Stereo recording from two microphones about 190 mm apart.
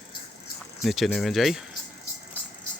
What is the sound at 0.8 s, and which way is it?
Speech, centre (ahead or behind).